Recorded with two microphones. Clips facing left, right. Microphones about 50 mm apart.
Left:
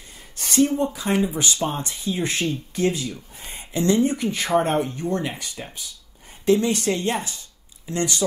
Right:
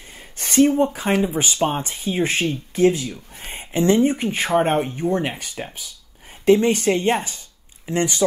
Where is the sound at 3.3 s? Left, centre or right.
Right.